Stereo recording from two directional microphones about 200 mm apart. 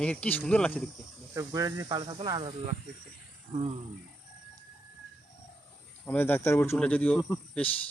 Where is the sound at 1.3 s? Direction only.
15° right (ahead or behind).